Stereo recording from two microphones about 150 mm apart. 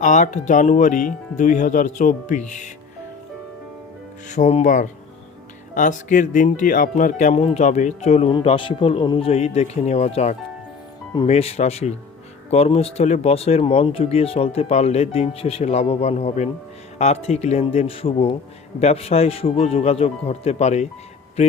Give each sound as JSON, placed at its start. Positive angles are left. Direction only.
{"t": 0.0, "sound": "speech", "side_deg": 55}
{"t": 4.3, "sound": "speech", "side_deg": 50}
{"t": 8.3, "sound": "speech", "side_deg": 35}